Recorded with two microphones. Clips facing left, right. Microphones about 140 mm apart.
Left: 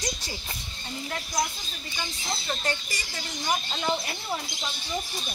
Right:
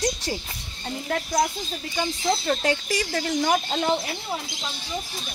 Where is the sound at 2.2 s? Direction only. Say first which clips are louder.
Right 8 dB; 90° right; by 3.8 s 60° right (ahead or behind).